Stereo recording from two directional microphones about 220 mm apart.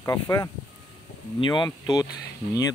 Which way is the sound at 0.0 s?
15° left (ahead or behind).